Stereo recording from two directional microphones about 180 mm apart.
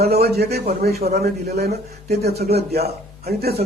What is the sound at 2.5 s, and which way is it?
Speech, 60° right (ahead or behind).